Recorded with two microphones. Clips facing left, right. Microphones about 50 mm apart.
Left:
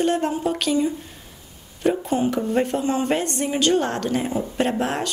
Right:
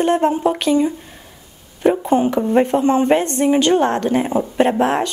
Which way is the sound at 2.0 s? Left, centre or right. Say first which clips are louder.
Right 6 dB; right.